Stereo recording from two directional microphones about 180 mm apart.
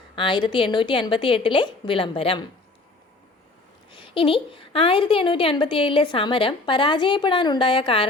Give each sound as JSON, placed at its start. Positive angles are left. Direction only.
{"t": 0.2, "sound": "a woman's voice", "side_deg": 25}
{"t": 3.9, "sound": "a woman's voice", "side_deg": 30}